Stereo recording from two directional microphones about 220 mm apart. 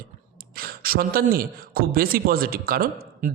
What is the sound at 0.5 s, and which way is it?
A man's voice, 40° right (ahead or behind).